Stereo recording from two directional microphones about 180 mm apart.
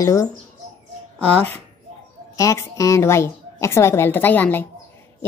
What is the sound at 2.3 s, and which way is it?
A woman's voice, 15° left (ahead or behind).